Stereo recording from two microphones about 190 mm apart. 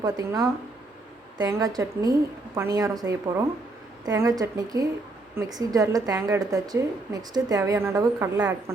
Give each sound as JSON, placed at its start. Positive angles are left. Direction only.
{"t": 0.0, "sound": "a woman's voice", "side_deg": -15}